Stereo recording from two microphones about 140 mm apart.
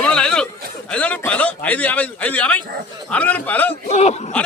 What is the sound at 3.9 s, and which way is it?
Speech, 50° left (ahead or behind).